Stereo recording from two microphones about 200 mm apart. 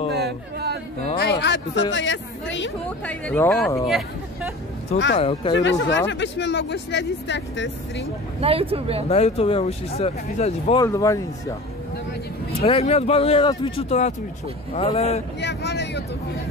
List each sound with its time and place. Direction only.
0.1 s a sound: 55° right (ahead or behind)
1.1 s speech: 55° left (ahead or behind)
3.1 s speech: 10° left (ahead or behind)
3.8 s speech: centre (ahead or behind)
5.1 s speech: 30° left (ahead or behind)
5.6 s speech: 65° left (ahead or behind)
8.4 s speech: 30° right (ahead or behind)
9.1 s speech: 30° left (ahead or behind)
10.8 s speech: 15° left (ahead or behind)
12.6 s speech: 30° left (ahead or behind)
15.4 s speech: 60° left (ahead or behind)